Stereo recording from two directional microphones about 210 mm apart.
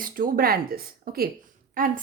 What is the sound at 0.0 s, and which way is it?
Speech, 45° right (ahead or behind).